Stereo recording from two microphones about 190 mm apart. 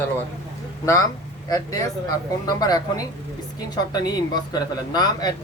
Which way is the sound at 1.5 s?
20° left (ahead or behind).